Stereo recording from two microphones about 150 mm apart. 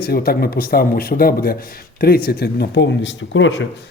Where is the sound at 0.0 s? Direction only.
90° left.